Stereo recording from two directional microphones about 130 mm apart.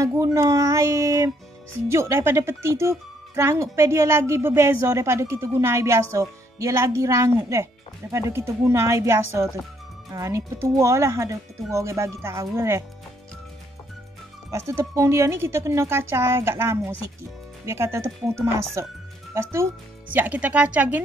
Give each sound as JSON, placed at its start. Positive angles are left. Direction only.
{"t": 0.0, "sound": "speech", "side_deg": -25}
{"t": 14.5, "sound": "speech", "side_deg": -20}